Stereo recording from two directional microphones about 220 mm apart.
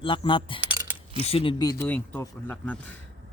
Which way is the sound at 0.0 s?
25° left (ahead or behind).